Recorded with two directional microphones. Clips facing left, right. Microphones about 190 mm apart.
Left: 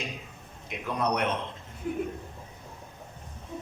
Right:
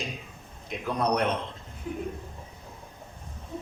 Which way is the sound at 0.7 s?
35° right (ahead or behind).